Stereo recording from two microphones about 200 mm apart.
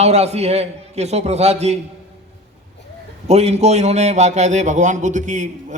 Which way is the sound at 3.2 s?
30° right (ahead or behind).